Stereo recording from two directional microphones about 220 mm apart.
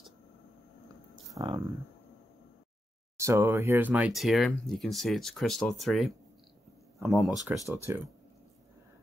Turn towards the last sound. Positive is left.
turn(degrees=-10)  # may be behind; listen again after turning